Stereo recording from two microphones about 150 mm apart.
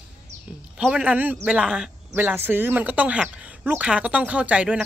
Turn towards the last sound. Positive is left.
turn(degrees=-10)  # may be behind; listen again after turning